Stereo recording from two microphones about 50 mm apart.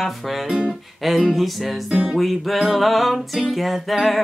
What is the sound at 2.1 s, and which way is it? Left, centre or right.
Music, centre.